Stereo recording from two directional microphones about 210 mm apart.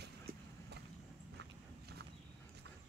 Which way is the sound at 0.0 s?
50° right (ahead or behind).